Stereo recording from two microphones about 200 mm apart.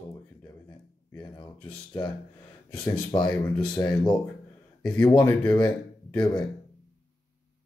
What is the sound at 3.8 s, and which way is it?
Speech, 5° left (ahead or behind).